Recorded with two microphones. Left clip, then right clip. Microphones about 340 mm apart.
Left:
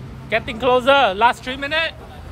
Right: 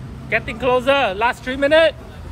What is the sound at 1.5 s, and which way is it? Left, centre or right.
Speech, centre.